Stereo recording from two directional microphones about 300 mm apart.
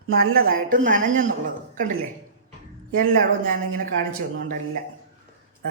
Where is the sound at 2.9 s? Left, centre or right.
Right.